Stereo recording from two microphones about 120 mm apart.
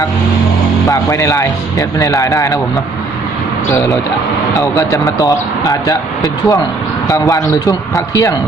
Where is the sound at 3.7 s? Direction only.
30° left (ahead or behind).